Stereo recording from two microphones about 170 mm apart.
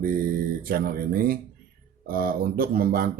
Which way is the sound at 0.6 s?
60° right (ahead or behind).